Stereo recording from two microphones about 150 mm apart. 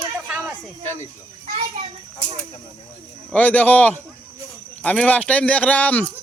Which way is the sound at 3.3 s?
10° left (ahead or behind).